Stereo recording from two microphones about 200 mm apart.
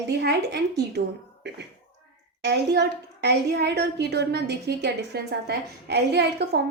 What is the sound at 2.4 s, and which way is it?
A woman's voice, 55° right (ahead or behind).